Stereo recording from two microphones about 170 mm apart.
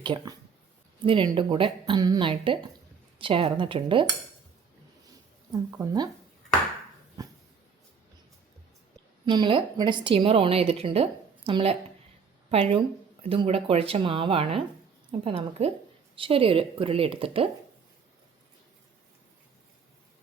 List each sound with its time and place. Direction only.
0.0 s a woman's voice: 25° right (ahead or behind)
5.7 s speech: 20° right (ahead or behind)
9.2 s a woman's voice: 25° right (ahead or behind)